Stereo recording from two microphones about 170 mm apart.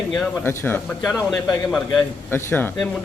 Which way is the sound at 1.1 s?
Centre (ahead or behind).